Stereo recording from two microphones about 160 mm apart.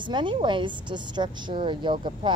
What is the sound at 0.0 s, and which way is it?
A woman's voice, 30° right (ahead or behind).